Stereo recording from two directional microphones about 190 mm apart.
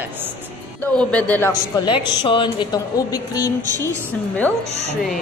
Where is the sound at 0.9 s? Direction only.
5° left (ahead or behind).